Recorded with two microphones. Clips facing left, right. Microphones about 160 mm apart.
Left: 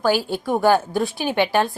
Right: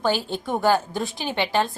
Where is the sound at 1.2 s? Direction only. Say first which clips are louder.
Left 3 dB; 15° left (ahead or behind).